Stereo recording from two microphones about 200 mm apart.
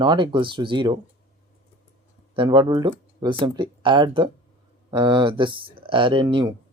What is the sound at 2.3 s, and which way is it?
Speech, 20° right (ahead or behind).